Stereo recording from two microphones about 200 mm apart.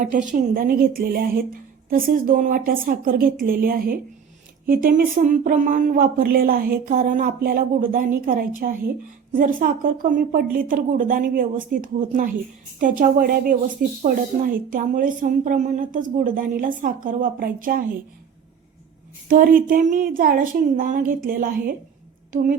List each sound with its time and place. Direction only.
0.3 s a woman's voice: 40° right (ahead or behind)
19.3 s speech: 45° right (ahead or behind)